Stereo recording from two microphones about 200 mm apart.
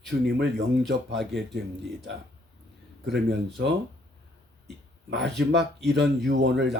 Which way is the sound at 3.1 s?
60° right (ahead or behind).